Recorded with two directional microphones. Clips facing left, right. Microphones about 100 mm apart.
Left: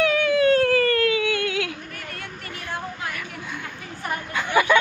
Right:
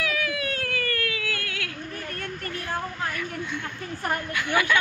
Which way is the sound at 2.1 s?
45° right (ahead or behind).